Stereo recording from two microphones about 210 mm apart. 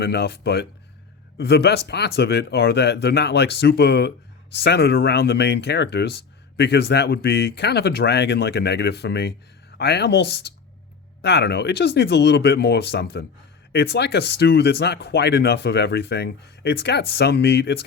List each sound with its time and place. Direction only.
0.0 s speech: 50° left (ahead or behind)